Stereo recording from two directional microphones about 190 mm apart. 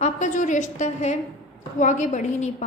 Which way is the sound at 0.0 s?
40° left (ahead or behind).